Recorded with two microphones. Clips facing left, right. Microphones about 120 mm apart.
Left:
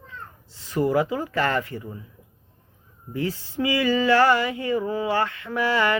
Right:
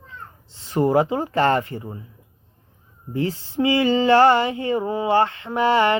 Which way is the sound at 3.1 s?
30° right (ahead or behind).